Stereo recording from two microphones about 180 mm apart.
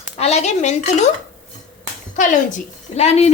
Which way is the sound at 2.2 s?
45° left (ahead or behind).